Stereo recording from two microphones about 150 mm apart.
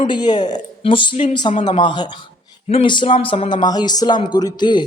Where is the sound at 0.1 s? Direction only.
30° left (ahead or behind).